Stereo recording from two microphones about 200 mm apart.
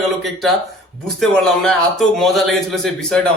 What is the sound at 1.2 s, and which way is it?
Speech, centre (ahead or behind).